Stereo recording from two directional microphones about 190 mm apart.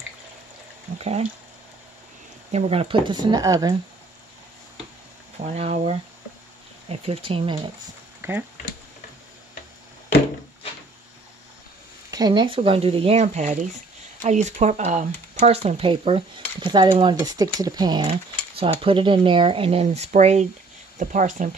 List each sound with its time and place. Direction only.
0.9 s speech: 35° right (ahead or behind)
2.5 s speech: 35° right (ahead or behind)
5.4 s speech: 35° right (ahead or behind)
8.2 s speech: 10° right (ahead or behind)
12.1 s speech: 20° right (ahead or behind); by 21.5 s 40° right (ahead or behind)